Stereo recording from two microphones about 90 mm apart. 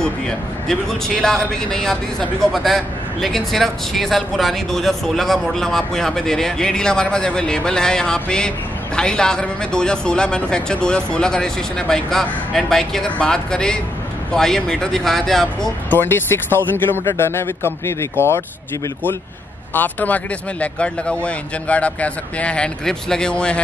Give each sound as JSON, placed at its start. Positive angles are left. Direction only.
{"t": 0.7, "sound": "a man's voice", "side_deg": 5}
{"t": 15.9, "sound": "speech", "side_deg": 25}
{"t": 19.7, "sound": "a man's voice", "side_deg": 20}